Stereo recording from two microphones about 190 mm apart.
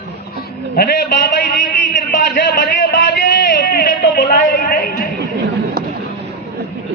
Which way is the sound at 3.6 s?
55° left (ahead or behind).